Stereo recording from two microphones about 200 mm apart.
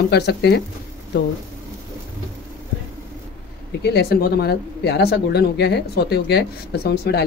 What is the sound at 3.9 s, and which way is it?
Speech, 55° left (ahead or behind).